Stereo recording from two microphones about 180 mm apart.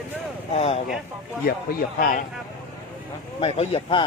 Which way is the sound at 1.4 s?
55° left (ahead or behind).